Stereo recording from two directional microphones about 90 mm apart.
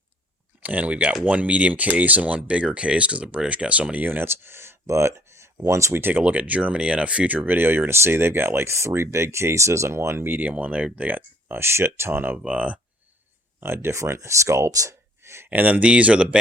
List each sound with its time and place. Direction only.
0.6 s speech: 15° right (ahead or behind)
13.6 s speech: 25° right (ahead or behind)
15.4 s speech: 20° right (ahead or behind)